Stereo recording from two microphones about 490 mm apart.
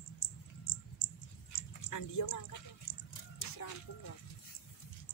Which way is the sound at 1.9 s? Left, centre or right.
Left.